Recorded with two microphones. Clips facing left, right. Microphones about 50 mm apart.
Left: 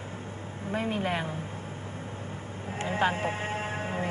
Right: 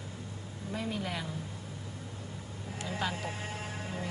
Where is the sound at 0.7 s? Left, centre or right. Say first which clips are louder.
Left 6 dB; left.